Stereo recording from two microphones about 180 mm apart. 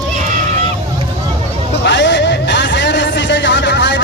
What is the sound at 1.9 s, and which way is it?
Music, 75° left (ahead or behind).